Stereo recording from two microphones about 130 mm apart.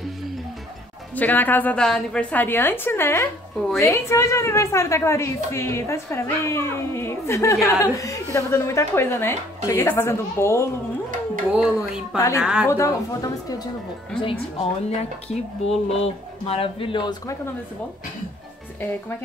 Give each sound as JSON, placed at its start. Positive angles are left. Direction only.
{"t": 1.1, "sound": "a woman's voice", "side_deg": 15}
{"t": 3.5, "sound": "a woman's voice", "side_deg": 0}
{"t": 3.9, "sound": "a woman's voice", "side_deg": 20}
{"t": 11.5, "sound": "speech", "side_deg": -5}
{"t": 12.6, "sound": "a woman's voice", "side_deg": 25}
{"t": 14.2, "sound": "speech", "side_deg": 45}